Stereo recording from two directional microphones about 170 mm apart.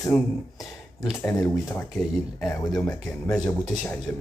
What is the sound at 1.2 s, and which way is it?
Speech, 15° left (ahead or behind).